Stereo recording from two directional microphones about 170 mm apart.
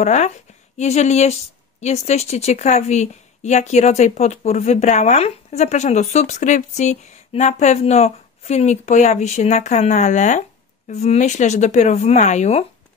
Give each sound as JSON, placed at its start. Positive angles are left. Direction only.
{"t": 0.0, "sound": "a woman's voice", "side_deg": 40}